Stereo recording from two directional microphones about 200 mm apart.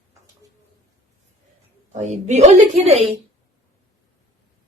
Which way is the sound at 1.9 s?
35° right (ahead or behind).